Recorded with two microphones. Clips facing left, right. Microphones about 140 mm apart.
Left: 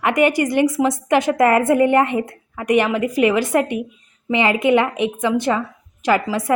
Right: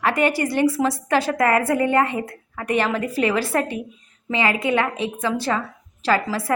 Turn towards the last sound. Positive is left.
turn(degrees=20)  # may be behind; listen again after turning